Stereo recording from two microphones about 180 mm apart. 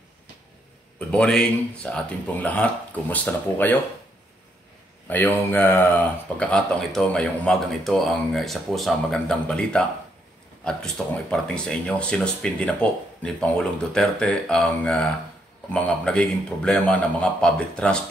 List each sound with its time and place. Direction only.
0.9 s speech: 5° left (ahead or behind)
5.0 s speech: 10° left (ahead or behind)